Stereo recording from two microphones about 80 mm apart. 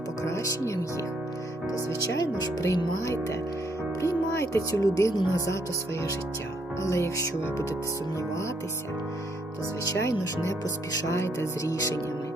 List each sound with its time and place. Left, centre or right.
0.3 s speech: left
2.0 s speech: left
6.8 s speech: left
9.8 s speech: left